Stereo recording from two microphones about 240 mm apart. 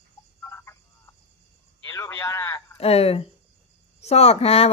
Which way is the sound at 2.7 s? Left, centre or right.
Left.